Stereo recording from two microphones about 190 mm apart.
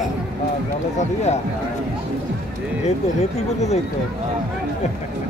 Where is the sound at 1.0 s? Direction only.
35° left (ahead or behind).